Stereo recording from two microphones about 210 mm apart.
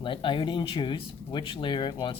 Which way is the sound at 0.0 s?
25° left (ahead or behind).